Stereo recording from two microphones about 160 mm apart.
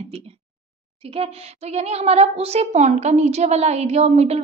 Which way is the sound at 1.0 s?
40° right (ahead or behind).